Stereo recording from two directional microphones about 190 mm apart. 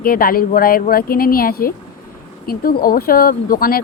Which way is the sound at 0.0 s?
50° left (ahead or behind).